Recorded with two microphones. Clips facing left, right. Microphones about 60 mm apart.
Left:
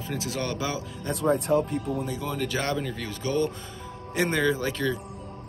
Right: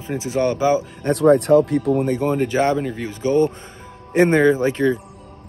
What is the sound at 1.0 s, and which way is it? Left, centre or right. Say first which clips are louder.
Speech: right 9 dB; right.